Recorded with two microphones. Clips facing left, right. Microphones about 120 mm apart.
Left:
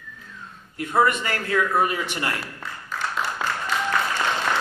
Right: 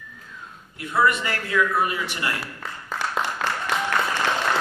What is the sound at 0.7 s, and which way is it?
A man's voice, 45° left (ahead or behind).